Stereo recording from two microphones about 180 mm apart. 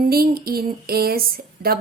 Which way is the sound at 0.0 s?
55° right (ahead or behind).